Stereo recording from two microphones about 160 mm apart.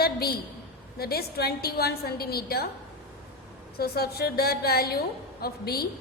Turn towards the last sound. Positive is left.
turn(degrees=75)  # may be behind; listen again after turning